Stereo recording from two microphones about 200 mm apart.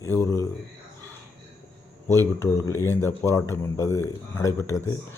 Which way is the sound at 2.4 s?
15° left (ahead or behind).